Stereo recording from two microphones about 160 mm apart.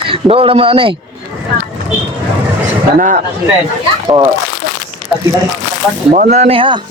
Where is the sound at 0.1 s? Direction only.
35° right (ahead or behind).